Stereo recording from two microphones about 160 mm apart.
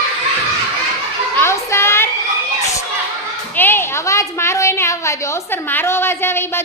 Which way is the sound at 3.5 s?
15° left (ahead or behind).